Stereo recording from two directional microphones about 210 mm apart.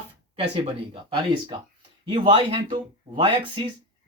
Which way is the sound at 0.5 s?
25° right (ahead or behind).